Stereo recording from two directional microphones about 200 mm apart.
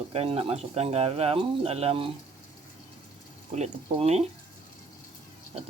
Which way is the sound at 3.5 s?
35° right (ahead or behind).